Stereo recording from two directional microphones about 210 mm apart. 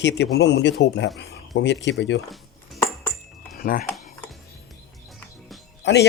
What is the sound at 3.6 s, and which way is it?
Speech, 45° left (ahead or behind).